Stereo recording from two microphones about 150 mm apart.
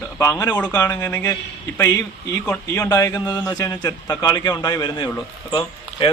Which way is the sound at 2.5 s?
20° left (ahead or behind).